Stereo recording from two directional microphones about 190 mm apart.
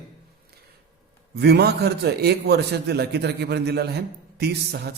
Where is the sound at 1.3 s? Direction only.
60° right (ahead or behind).